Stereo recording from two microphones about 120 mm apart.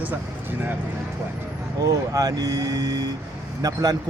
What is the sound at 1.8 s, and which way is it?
Speech, 30° right (ahead or behind).